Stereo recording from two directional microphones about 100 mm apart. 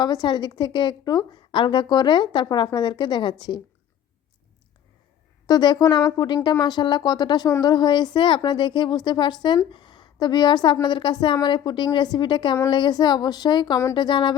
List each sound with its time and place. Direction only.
0.0 s a woman's voice: 45° left (ahead or behind)
5.5 s a woman's voice: 45° left (ahead or behind)